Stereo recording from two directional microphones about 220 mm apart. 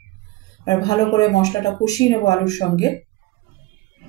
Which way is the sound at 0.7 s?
15° left (ahead or behind).